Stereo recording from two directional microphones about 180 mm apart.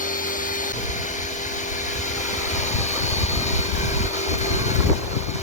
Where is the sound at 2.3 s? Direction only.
40° left (ahead or behind).